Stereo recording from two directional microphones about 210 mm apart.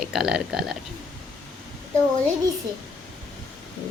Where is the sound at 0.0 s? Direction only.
Centre (ahead or behind).